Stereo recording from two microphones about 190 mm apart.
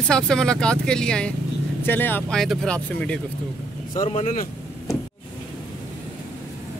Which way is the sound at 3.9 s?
40° left (ahead or behind).